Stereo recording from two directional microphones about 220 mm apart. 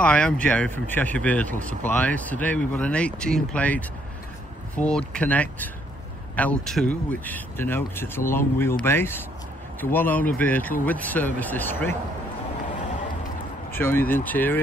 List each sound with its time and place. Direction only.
0.0 s speech: 5° left (ahead or behind)
13.7 s speech: 10° left (ahead or behind)